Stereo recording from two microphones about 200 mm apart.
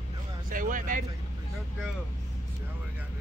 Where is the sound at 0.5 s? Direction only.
40° right (ahead or behind).